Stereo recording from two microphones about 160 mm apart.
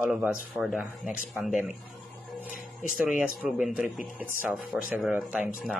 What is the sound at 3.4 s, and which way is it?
Speech, 5° right (ahead or behind).